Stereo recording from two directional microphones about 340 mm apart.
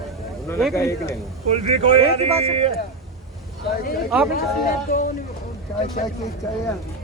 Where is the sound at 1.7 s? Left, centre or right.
Centre.